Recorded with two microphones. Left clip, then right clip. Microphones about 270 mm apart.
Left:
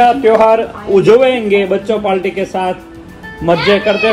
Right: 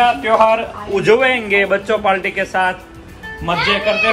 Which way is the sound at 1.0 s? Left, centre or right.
Centre.